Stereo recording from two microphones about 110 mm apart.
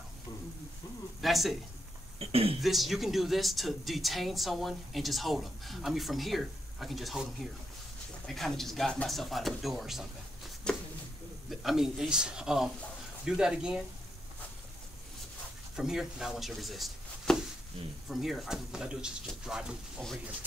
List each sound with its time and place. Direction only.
1.2 s speech: centre (ahead or behind)
2.1 s speech: 65° right (ahead or behind)
2.6 s speech: centre (ahead or behind)
8.3 s speech: centre (ahead or behind)
10.7 s a sound: 10° left (ahead or behind)
11.6 s speech: 5° right (ahead or behind)
15.7 s speech: 5° right (ahead or behind)